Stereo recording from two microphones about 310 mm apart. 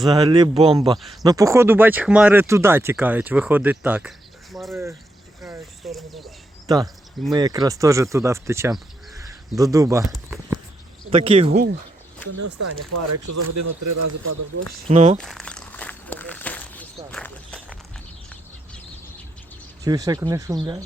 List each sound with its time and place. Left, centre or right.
0.1 s speech: centre
5.4 s a sound: centre
7.3 s speech: centre
11.1 s speech: centre
12.4 s speech: right
14.8 s speech: centre
15.2 s walk: centre
19.8 s speech: centre